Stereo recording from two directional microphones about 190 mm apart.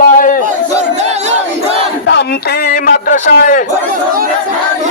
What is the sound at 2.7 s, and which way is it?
Speech, 50° left (ahead or behind).